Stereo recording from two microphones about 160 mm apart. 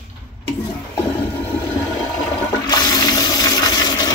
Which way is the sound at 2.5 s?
25° left (ahead or behind).